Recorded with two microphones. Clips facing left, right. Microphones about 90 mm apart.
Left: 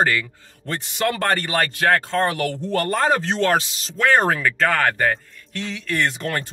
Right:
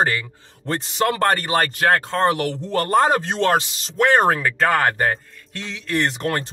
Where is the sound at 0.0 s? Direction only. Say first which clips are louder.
Left 1 dB; 25° right (ahead or behind).